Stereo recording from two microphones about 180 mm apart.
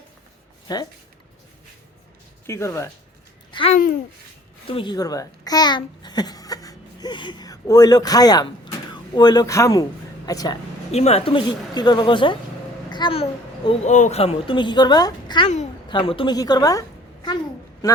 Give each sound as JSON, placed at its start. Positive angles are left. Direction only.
{"t": 0.7, "sound": "a woman's voice", "side_deg": 20}
{"t": 2.5, "sound": "speech", "side_deg": 15}
{"t": 3.5, "sound": "a child's voice", "side_deg": 30}
{"t": 10.9, "sound": "a woman's voice", "side_deg": 35}